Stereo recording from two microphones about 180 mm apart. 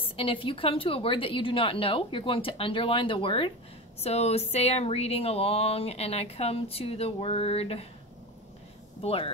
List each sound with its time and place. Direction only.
0.0 s a woman's voice: 30° left (ahead or behind)
9.0 s speech: 30° left (ahead or behind)